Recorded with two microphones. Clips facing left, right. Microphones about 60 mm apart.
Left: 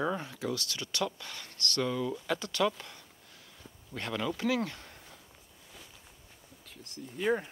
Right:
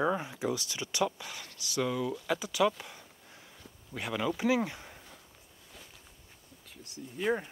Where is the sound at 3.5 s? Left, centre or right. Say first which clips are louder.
Even; centre.